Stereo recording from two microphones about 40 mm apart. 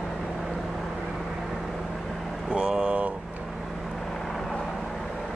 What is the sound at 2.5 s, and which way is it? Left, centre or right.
Vehicle, right.